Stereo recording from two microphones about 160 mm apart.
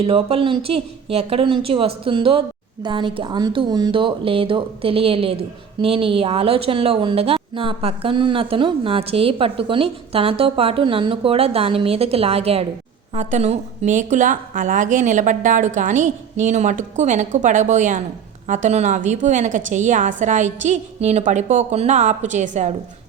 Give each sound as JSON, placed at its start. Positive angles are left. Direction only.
{"t": 0.0, "sound": "a woman's voice", "side_deg": -35}